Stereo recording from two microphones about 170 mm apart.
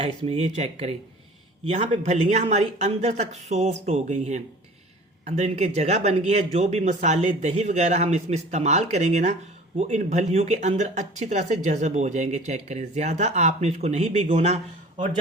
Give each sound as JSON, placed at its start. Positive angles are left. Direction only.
{"t": 0.0, "sound": "speech", "side_deg": -35}